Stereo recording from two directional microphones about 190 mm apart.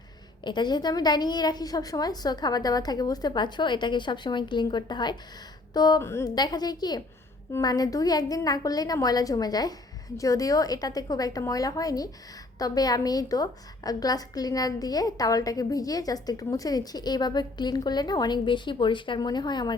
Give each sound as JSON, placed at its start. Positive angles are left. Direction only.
{"t": 0.4, "sound": "a woman's voice", "side_deg": 25}